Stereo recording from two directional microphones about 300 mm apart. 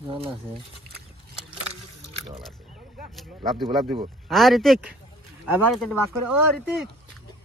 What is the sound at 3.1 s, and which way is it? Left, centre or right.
Speech, centre.